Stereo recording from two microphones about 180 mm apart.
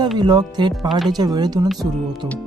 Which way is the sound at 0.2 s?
25° right (ahead or behind).